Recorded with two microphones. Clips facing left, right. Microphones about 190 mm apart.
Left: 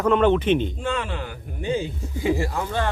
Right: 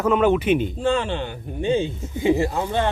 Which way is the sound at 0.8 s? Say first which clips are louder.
Right 5 dB; 30° right (ahead or behind).